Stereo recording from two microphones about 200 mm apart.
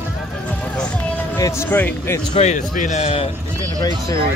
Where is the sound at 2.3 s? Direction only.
35° left (ahead or behind).